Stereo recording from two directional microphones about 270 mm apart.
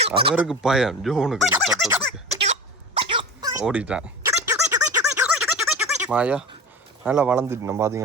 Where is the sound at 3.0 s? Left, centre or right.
Centre.